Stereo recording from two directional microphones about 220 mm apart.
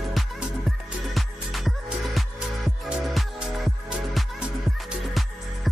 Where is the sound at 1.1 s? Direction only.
Centre (ahead or behind).